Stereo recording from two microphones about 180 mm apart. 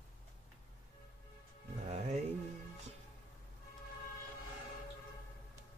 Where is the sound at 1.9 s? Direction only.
40° right (ahead or behind).